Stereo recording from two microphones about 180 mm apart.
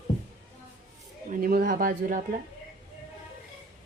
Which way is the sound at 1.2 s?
50° right (ahead or behind).